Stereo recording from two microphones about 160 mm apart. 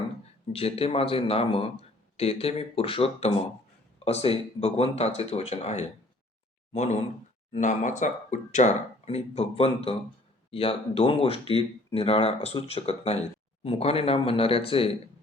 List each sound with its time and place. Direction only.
0.5 s speech: 40° left (ahead or behind)